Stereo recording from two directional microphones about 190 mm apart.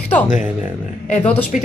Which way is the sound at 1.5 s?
40° left (ahead or behind).